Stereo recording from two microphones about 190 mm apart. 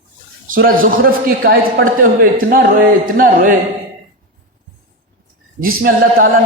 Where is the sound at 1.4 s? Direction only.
70° right (ahead or behind).